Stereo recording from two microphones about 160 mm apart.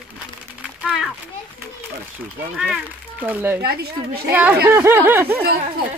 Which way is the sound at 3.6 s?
75° right (ahead or behind).